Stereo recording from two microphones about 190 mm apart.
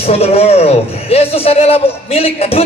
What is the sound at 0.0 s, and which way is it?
A man's voice, 30° left (ahead or behind).